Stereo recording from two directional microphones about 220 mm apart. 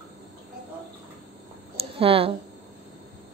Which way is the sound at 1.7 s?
25° right (ahead or behind).